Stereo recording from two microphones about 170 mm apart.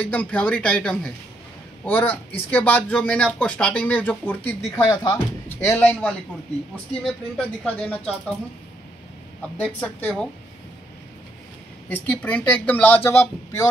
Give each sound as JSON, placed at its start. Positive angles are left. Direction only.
{"t": 0.0, "sound": "speech", "side_deg": 10}
{"t": 4.6, "sound": "speech", "side_deg": 20}
{"t": 9.8, "sound": "speech", "side_deg": 5}
{"t": 11.9, "sound": "speech", "side_deg": 10}